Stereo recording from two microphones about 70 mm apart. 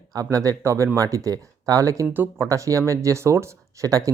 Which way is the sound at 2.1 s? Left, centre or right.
Right.